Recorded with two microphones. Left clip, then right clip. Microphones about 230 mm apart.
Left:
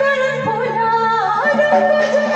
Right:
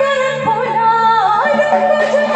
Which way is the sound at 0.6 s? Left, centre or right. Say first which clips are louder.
Right 4 dB; right.